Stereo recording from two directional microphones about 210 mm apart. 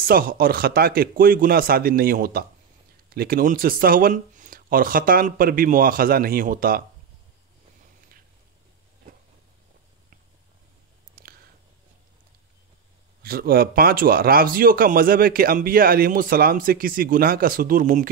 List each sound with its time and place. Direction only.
0.0 s speech: 45° right (ahead or behind)
11.2 s a sound: 45° right (ahead or behind)
13.2 s speech: 45° right (ahead or behind)